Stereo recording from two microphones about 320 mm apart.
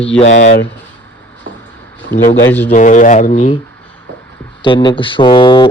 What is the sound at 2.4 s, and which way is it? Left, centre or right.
Speech, centre.